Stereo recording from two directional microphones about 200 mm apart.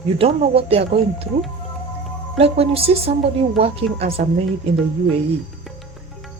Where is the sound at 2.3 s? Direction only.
30° right (ahead or behind).